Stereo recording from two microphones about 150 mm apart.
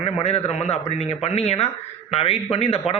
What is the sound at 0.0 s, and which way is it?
Speech, 45° left (ahead or behind).